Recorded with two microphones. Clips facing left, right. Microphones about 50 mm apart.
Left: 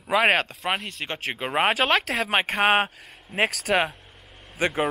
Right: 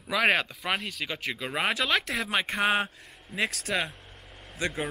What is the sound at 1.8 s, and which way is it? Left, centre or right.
Speech, left.